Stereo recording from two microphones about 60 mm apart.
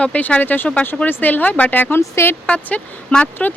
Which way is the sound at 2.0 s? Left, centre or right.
Left.